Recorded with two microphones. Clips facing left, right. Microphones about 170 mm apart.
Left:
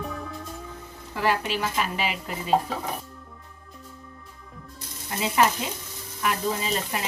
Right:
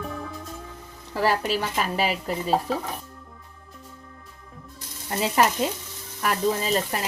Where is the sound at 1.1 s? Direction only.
40° right (ahead or behind).